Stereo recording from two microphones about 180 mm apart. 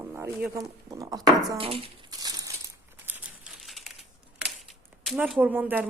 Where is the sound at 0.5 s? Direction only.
20° right (ahead or behind).